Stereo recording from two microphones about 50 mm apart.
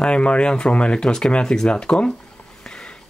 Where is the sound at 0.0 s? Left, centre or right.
Left.